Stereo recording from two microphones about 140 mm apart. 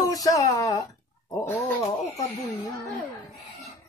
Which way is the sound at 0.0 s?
25° left (ahead or behind).